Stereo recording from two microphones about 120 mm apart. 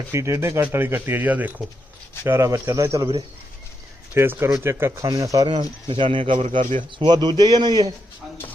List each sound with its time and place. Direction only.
0.1 s speech: 25° right (ahead or behind)
4.1 s speech: 20° right (ahead or behind)
5.5 s speech: 40° right (ahead or behind)
6.4 s speech: 90° right
7.0 s a man's voice: 40° right (ahead or behind)